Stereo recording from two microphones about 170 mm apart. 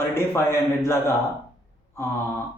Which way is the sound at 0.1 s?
15° left (ahead or behind).